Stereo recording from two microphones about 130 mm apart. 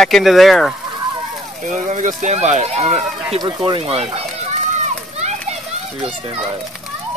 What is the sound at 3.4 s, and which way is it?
Speech, 35° right (ahead or behind).